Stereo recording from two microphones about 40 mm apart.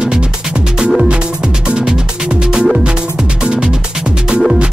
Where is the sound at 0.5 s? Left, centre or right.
Right.